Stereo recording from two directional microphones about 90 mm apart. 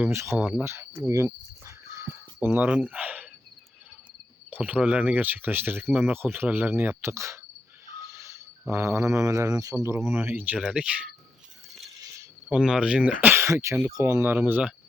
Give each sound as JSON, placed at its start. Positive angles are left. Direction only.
{"t": 0.1, "sound": "a sound", "side_deg": -30}
{"t": 0.3, "sound": "speech", "side_deg": -10}
{"t": 0.6, "sound": "cricket", "side_deg": -25}
{"t": 4.5, "sound": "speech", "side_deg": -15}
{"t": 8.1, "sound": "a sound", "side_deg": -35}
{"t": 9.8, "sound": "speech", "side_deg": -30}
{"t": 12.5, "sound": "speech", "side_deg": -10}
{"t": 13.3, "sound": "speech", "side_deg": -30}